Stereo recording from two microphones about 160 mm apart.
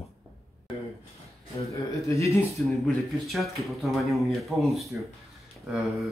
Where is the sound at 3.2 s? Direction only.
Centre (ahead or behind).